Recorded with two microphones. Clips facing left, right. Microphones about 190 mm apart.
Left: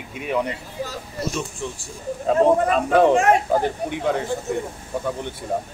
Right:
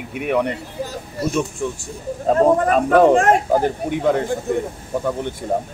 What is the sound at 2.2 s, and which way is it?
Speech, 40° right (ahead or behind).